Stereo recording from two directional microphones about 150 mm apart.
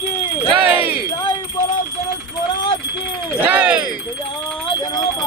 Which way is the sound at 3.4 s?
10° right (ahead or behind).